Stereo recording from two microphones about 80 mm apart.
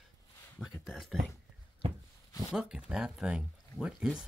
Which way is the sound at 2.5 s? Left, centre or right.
Centre.